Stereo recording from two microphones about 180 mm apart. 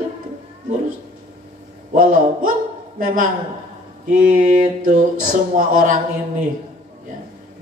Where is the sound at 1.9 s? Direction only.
50° right (ahead or behind).